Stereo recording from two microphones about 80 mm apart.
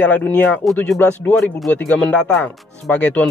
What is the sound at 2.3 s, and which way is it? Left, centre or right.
Speech, left.